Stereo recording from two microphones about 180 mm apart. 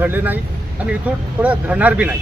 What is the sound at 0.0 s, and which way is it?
Speech, 10° right (ahead or behind).